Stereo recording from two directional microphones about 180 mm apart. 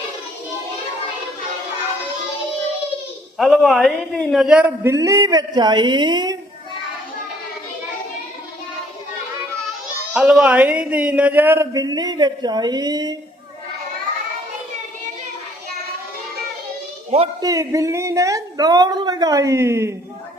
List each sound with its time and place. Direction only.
3.3 s speech: centre (ahead or behind); by 6.3 s 25° right (ahead or behind)
10.2 s speech: 5° right (ahead or behind); by 13.1 s 20° right (ahead or behind)
17.4 s speech: 20° right (ahead or behind)